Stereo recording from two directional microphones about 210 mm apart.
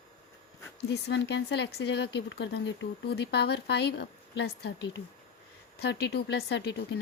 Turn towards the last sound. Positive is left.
turn(degrees=55)  # may be behind; listen again after turning